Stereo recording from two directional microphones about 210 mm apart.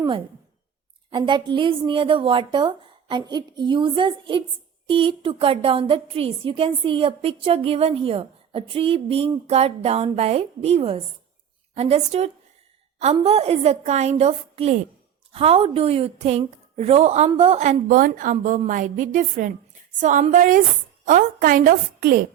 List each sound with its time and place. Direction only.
1.1 s a woman's voice: 20° right (ahead or behind); by 22.2 s 45° right (ahead or behind)